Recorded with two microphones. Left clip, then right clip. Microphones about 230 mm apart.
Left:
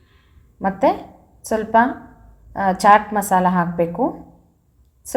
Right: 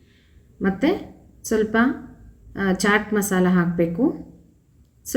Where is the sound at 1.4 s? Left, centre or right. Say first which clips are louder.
Left 4 dB; left.